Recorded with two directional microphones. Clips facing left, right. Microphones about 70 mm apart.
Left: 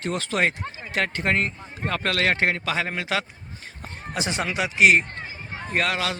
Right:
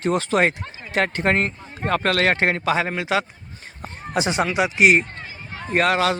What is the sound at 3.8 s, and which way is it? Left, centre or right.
Speech, centre.